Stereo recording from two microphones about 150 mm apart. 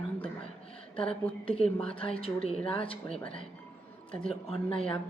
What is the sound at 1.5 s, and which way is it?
A woman's voice, 40° left (ahead or behind).